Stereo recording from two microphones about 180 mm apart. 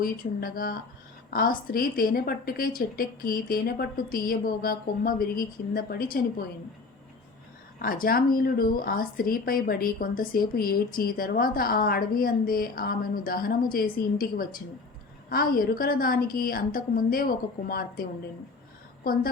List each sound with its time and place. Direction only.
0.0 s a woman's voice: 55° left (ahead or behind)
7.8 s a woman's voice: 55° left (ahead or behind)